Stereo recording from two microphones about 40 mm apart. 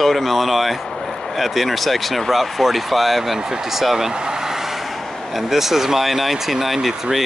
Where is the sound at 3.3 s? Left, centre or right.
Centre.